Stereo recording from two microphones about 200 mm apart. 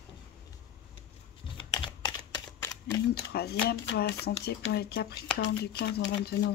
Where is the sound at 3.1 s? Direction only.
55° left (ahead or behind).